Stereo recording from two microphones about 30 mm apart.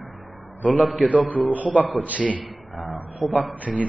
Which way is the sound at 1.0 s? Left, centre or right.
Right.